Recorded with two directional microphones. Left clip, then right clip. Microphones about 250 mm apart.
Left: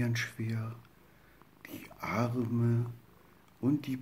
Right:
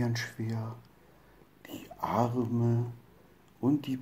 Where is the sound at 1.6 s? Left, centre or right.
Left.